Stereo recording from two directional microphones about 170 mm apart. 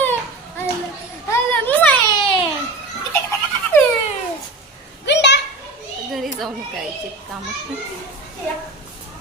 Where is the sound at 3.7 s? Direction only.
15° left (ahead or behind).